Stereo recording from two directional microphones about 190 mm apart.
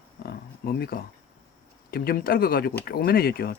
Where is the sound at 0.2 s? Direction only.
55° left (ahead or behind).